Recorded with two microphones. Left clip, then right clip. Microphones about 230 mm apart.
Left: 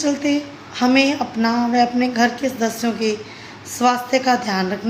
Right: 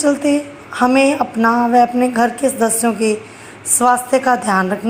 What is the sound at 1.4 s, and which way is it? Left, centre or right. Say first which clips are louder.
Speech: right 6 dB; centre.